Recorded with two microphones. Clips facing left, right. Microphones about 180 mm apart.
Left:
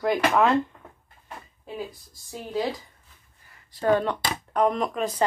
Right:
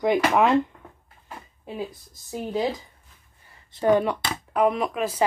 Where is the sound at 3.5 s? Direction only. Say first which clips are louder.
Right 2 dB; 25° right (ahead or behind).